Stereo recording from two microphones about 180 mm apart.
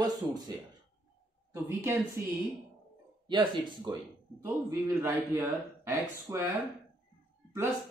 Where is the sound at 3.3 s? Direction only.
25° right (ahead or behind).